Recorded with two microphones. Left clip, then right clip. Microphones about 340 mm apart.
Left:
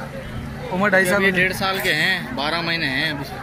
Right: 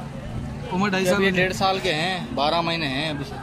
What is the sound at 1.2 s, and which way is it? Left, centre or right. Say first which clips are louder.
Speech: left 2 dB; right.